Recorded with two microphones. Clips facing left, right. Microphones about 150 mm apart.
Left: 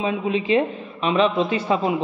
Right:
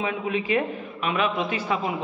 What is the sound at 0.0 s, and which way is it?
A man's voice, 20° left (ahead or behind).